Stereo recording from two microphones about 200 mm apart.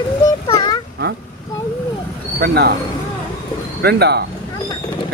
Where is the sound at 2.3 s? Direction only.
50° right (ahead or behind).